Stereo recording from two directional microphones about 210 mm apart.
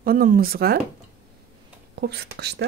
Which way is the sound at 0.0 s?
45° right (ahead or behind).